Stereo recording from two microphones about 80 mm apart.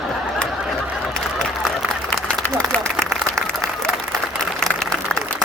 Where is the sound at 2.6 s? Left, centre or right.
Centre.